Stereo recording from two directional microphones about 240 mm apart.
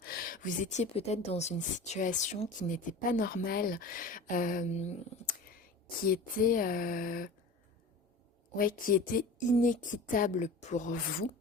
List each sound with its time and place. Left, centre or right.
0.0 s speech: left
6.0 s speech: left
8.5 s speech: left